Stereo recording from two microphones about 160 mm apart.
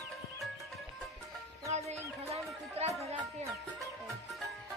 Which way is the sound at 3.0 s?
40° right (ahead or behind).